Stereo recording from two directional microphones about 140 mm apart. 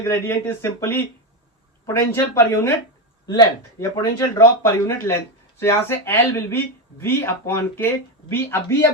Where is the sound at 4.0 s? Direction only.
20° left (ahead or behind).